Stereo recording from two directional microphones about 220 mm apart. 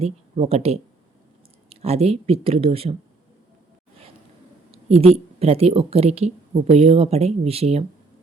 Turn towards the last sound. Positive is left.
turn(degrees=-25)  # may be behind; listen again after turning